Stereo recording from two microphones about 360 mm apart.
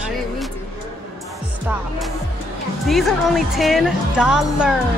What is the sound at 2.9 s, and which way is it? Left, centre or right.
A woman's voice, centre.